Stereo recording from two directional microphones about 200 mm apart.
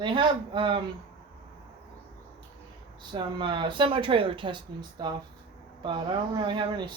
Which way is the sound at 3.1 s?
25° right (ahead or behind).